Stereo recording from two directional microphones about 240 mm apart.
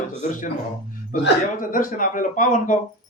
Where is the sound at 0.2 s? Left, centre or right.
Left.